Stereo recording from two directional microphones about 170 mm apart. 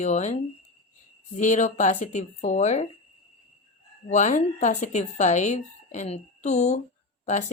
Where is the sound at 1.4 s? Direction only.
45° left (ahead or behind).